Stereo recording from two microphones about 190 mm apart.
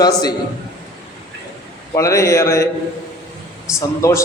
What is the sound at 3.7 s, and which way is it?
Speech, 15° left (ahead or behind).